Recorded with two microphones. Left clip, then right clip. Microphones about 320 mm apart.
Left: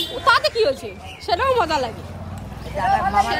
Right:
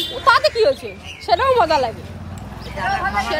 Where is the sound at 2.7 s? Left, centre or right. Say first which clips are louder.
Left 2 dB; left.